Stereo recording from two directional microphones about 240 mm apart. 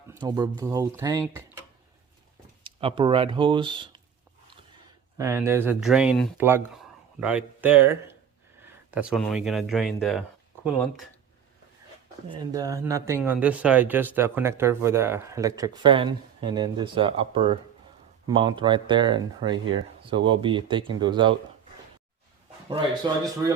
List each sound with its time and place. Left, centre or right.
0.1 s speech: centre
2.6 s speech: right
5.1 s speech: centre
12.3 s speech: centre
23.2 s speech: centre